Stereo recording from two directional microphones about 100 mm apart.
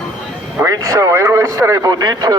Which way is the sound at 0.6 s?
35° right (ahead or behind).